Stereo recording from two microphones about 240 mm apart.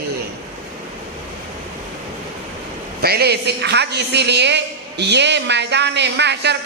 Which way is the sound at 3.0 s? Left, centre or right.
Right.